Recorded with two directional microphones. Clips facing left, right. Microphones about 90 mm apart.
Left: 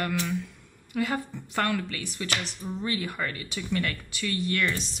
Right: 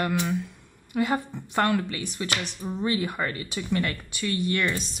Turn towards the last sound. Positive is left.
turn(degrees=-20)  # may be behind; listen again after turning